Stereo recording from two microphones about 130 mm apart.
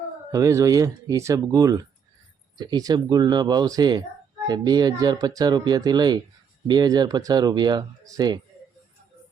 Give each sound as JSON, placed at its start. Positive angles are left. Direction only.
{"t": 0.3, "sound": "speech", "side_deg": -25}